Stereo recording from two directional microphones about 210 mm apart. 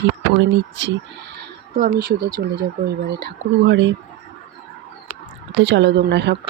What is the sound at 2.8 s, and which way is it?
Speech, 50° right (ahead or behind).